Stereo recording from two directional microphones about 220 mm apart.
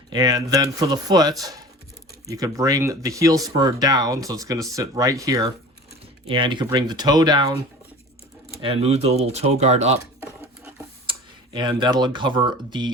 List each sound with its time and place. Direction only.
0.1 s speech: 15° right (ahead or behind)
8.6 s speech: 25° right (ahead or behind)
11.0 s speech: 20° right (ahead or behind)